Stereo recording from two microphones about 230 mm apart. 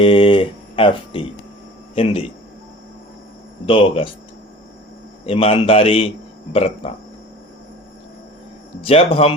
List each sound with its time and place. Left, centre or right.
0.0 s speech: left
3.7 s a man's voice: left
5.2 s a man's voice: left
8.8 s a man's voice: left